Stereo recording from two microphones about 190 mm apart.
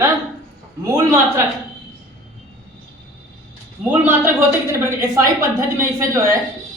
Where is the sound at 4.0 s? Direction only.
15° right (ahead or behind).